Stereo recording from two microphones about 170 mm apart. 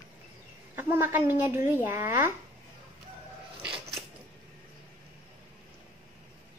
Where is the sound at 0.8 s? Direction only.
15° right (ahead or behind).